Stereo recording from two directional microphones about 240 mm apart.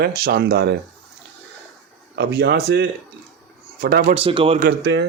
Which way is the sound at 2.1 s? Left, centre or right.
Right.